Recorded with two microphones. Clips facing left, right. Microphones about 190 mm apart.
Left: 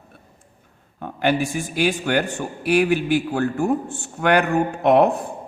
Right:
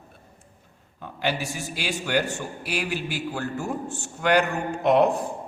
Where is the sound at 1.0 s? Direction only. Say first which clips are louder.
Left 7 dB; 55° left (ahead or behind).